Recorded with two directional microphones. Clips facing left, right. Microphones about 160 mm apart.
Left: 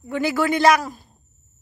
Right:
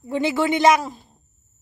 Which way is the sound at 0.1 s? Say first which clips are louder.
Even; 25° right (ahead or behind).